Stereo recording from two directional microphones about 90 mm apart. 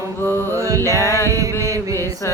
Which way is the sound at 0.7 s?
35° left (ahead or behind).